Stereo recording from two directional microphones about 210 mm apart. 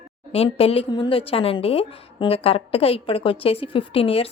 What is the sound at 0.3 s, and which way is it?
A woman's voice, 30° left (ahead or behind).